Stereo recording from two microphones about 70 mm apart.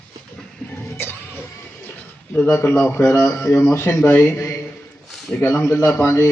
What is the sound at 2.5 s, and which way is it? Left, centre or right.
Speech, left.